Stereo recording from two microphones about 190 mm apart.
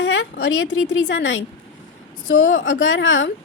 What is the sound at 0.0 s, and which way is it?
A woman's voice, 90° left.